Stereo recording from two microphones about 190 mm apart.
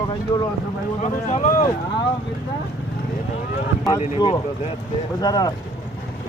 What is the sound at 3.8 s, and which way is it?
Speech, 20° left (ahead or behind).